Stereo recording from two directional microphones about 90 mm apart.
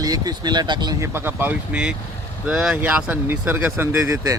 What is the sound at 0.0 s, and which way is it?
Speech, 45° right (ahead or behind).